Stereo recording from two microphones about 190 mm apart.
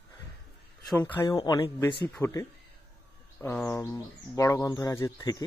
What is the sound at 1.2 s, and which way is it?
Speech, 20° left (ahead or behind).